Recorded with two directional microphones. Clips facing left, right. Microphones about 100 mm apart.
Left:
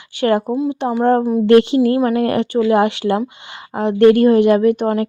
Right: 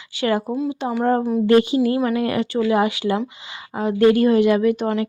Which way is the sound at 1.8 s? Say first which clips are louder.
Left 4 dB; 40° left (ahead or behind).